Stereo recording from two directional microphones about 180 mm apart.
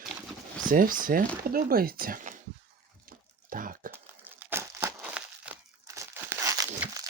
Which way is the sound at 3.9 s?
10° right (ahead or behind).